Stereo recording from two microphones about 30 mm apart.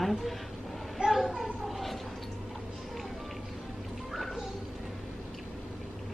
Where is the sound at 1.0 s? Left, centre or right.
Right.